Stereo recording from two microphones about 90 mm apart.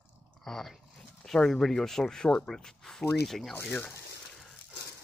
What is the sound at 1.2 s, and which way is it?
Speech, 5° left (ahead or behind).